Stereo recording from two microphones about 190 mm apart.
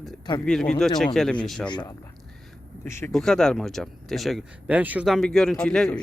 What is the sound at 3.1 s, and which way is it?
Speech, centre (ahead or behind).